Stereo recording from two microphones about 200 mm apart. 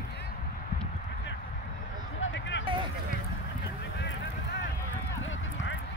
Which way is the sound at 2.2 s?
65° left (ahead or behind).